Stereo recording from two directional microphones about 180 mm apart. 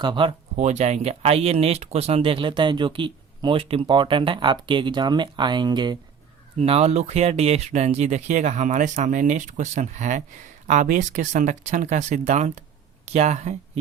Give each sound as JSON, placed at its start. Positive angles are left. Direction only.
{"t": 0.0, "sound": "speech", "side_deg": -25}
{"t": 0.6, "sound": "speech", "side_deg": -40}
{"t": 6.6, "sound": "speech", "side_deg": -35}